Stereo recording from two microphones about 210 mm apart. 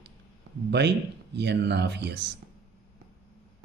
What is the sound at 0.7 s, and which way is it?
A man's voice, 55° right (ahead or behind).